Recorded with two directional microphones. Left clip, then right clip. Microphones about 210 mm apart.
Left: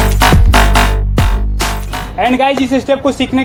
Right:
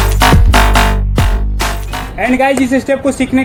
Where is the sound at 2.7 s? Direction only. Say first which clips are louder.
Even; 50° right (ahead or behind).